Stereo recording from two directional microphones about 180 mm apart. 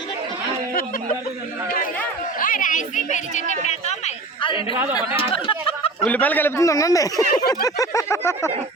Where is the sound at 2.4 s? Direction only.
50° left (ahead or behind); by 6.0 s 30° left (ahead or behind).